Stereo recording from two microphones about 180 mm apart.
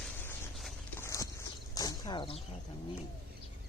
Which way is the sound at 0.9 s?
15° left (ahead or behind).